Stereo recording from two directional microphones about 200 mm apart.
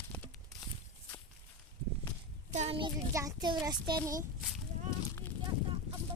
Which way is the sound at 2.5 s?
35° right (ahead or behind).